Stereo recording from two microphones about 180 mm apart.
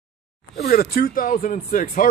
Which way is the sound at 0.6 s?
55° left (ahead or behind).